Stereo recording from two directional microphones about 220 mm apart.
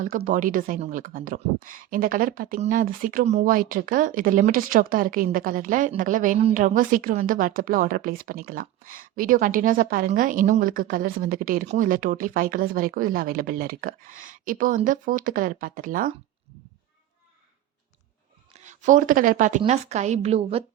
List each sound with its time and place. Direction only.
0.0 s speech: 35° right (ahead or behind)
18.5 s speech: 35° right (ahead or behind)